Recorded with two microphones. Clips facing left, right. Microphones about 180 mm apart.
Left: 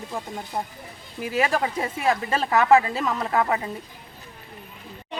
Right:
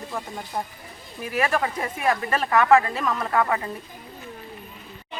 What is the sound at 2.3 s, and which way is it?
Speech, 25° left (ahead or behind).